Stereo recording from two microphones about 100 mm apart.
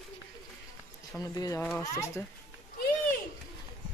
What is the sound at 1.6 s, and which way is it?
Speech, 20° left (ahead or behind).